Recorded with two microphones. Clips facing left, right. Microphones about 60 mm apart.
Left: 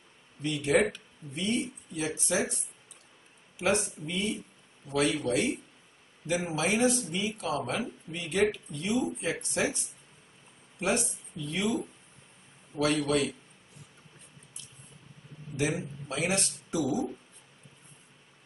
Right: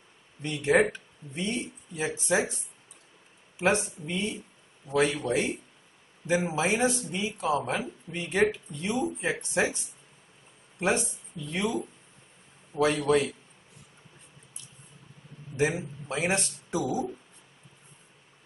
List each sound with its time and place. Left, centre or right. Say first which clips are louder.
0.4 s speech: right 2 dB; right
3.5 s speech: right 2 dB; right
10.8 s speech: right 2 dB; right
15.5 s a man's voice: right 3 dB; right